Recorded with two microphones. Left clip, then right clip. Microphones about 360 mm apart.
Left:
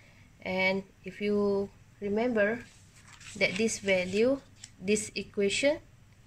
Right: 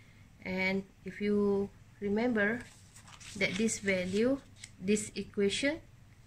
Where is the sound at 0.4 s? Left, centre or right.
Centre.